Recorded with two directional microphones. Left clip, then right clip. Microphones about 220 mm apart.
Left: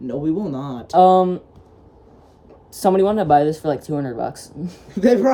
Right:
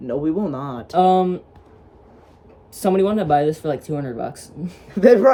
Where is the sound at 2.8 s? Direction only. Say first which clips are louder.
Left 2 dB; 15° left (ahead or behind).